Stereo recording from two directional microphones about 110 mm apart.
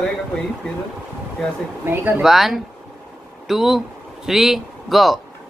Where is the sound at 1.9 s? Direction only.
15° right (ahead or behind).